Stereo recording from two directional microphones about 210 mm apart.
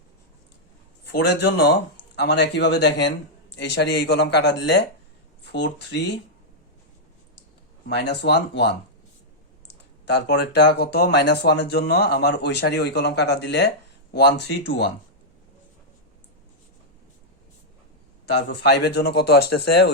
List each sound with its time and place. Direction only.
1.0 s speech: 55° left (ahead or behind)
7.9 s speech: 55° left (ahead or behind)
18.3 s speech: 50° left (ahead or behind)